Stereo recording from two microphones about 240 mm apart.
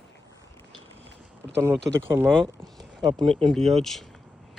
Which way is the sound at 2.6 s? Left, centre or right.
Centre.